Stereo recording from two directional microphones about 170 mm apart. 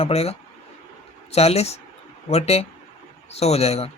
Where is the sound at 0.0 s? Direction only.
35° left (ahead or behind).